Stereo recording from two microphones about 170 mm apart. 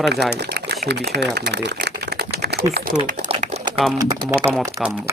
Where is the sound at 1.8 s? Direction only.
75° right (ahead or behind).